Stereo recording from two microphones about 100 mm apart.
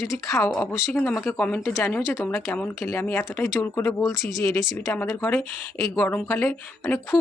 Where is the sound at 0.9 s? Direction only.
10° left (ahead or behind).